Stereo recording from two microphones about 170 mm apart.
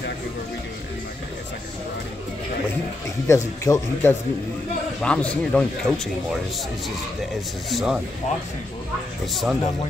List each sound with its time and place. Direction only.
3.3 s speech: 20° left (ahead or behind)
7.7 s speech: 5° right (ahead or behind)
9.3 s speech: centre (ahead or behind)